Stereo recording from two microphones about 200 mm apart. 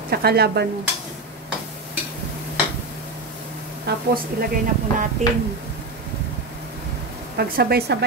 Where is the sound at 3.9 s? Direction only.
55° right (ahead or behind).